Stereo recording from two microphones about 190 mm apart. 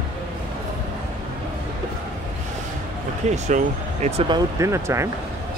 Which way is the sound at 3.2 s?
35° right (ahead or behind).